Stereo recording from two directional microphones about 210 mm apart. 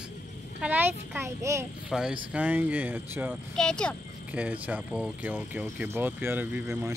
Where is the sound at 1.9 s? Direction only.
5° right (ahead or behind).